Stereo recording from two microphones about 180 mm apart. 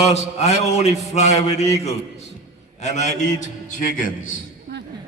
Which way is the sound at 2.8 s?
40° left (ahead or behind).